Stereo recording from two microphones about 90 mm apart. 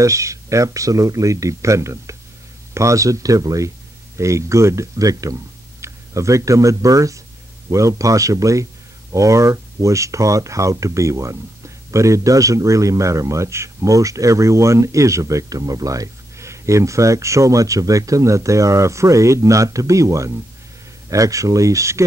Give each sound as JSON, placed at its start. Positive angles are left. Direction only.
{"t": 0.0, "sound": "speech", "side_deg": -35}